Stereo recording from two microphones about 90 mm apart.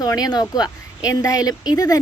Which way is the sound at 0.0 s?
45° left (ahead or behind).